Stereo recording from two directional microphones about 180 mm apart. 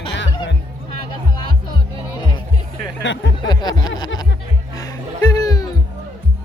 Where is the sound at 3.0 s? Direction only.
90° left.